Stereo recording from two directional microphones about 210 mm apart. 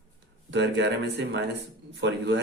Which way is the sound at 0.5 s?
55° right (ahead or behind).